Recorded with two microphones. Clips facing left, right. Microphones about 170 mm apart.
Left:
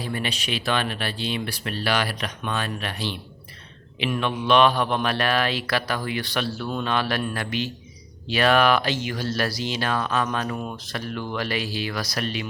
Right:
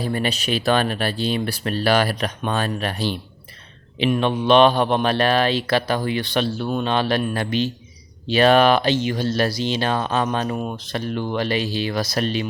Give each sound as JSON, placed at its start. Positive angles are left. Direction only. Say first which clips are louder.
{"t": 0.0, "sound": "speech", "louder": "right 6 dB", "side_deg": -40}
{"t": 3.9, "sound": "speech", "louder": "right 6 dB", "side_deg": -30}